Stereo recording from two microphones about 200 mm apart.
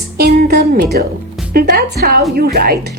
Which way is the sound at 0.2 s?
50° right (ahead or behind).